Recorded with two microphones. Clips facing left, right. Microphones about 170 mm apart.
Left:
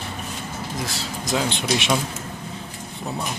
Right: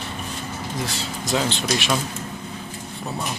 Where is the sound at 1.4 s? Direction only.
15° left (ahead or behind).